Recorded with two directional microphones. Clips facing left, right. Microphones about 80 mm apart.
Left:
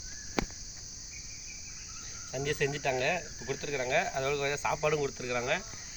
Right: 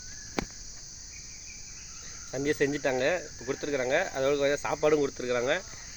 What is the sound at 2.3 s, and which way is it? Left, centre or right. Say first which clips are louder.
Speech: right 5 dB; right.